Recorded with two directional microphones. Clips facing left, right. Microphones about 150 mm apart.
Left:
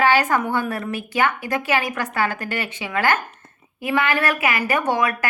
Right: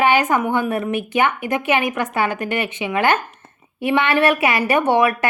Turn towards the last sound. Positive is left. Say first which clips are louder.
# right 5 dB
turn(degrees=-25)  # may be behind; listen again after turning